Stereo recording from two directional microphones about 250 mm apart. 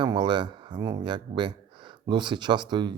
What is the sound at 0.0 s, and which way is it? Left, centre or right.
Speech, centre.